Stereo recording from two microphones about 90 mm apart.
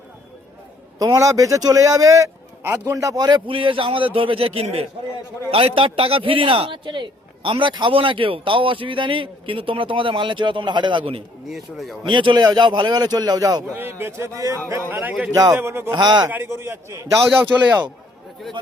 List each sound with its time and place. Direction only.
0.9 s speech: 40° right (ahead or behind)
3.2 s a man's voice: 50° right (ahead or behind)
3.4 s a man's voice: 75° right (ahead or behind)
11.4 s speech: centre (ahead or behind)
12.0 s a man's voice: 65° right (ahead or behind); by 13.7 s 45° right (ahead or behind)
13.7 s a man's voice: 25° right (ahead or behind)
14.3 s speech: 35° right (ahead or behind)
14.8 s a man's voice: 20° right (ahead or behind)
15.3 s a man's voice: 45° right (ahead or behind)
15.5 s a man's voice: 25° right (ahead or behind)
16.0 s a man's voice: 50° right (ahead or behind)
16.3 s a man's voice: 25° right (ahead or behind)